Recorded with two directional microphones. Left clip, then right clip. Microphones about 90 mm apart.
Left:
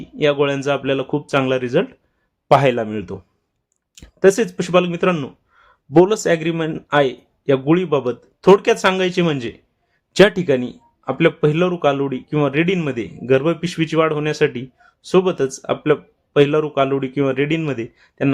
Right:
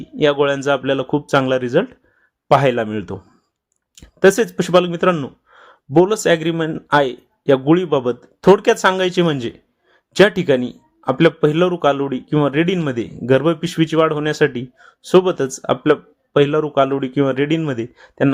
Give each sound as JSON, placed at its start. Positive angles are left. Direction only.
{"t": 0.0, "sound": "speech", "side_deg": -40}
{"t": 2.5, "sound": "speech", "side_deg": 0}
{"t": 2.8, "sound": "speech", "side_deg": -40}
{"t": 5.9, "sound": "speech", "side_deg": 0}
{"t": 6.2, "sound": "speech", "side_deg": -40}
{"t": 10.1, "sound": "speech", "side_deg": 0}
{"t": 10.4, "sound": "speech", "side_deg": -40}
{"t": 16.4, "sound": "speech", "side_deg": 0}
{"t": 16.6, "sound": "speech", "side_deg": -40}